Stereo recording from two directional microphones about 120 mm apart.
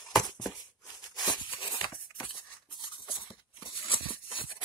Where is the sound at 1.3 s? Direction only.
45° left (ahead or behind).